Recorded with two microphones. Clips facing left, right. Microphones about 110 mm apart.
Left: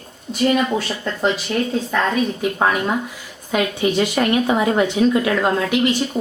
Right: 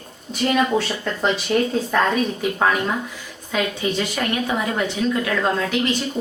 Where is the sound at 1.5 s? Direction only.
25° right (ahead or behind).